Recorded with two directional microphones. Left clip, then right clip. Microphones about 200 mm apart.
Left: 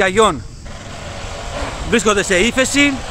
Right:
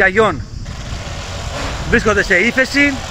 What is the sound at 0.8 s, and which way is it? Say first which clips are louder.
Vehicle: right 1 dB; 60° right (ahead or behind).